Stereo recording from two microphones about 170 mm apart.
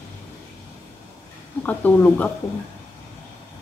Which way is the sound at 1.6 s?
10° left (ahead or behind).